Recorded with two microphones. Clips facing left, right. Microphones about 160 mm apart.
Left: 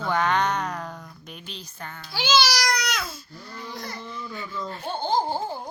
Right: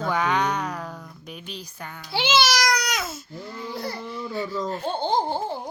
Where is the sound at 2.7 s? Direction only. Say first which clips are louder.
Right 2 dB; 40° right (ahead or behind).